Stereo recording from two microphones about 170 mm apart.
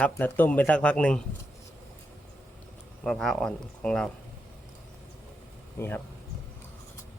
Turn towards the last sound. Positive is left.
turn(degrees=15)  # may be behind; listen again after turning